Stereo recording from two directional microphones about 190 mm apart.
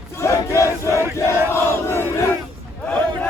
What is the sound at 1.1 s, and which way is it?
Crowd, 15° left (ahead or behind).